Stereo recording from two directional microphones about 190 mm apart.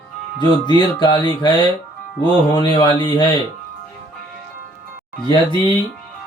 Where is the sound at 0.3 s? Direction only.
25° left (ahead or behind).